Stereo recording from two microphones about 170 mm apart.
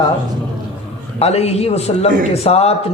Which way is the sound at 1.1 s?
35° left (ahead or behind).